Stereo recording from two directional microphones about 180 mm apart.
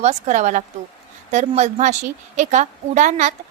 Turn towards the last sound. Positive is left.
turn(degrees=-40)  # may be behind; listen again after turning